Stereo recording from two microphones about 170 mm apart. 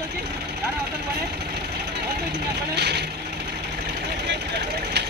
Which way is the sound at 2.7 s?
75° right (ahead or behind).